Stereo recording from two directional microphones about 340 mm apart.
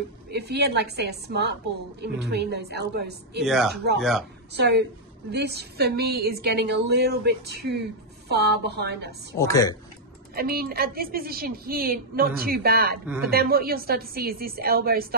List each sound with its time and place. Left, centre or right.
0.3 s a woman's voice: right
3.4 s speech: centre
4.6 s a woman's voice: right
9.4 s speech: centre
10.3 s a woman's voice: right
13.0 s speech: centre
13.3 s a woman's voice: right